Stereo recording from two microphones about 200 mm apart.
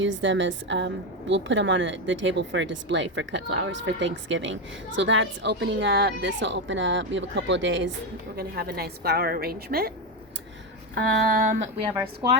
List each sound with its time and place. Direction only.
0.0 s a woman's voice: 65° right (ahead or behind)
8.4 s a woman's voice: 50° right (ahead or behind)
10.9 s speech: 55° right (ahead or behind)